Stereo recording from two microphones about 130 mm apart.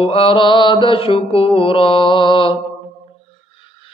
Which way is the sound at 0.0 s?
45° left (ahead or behind).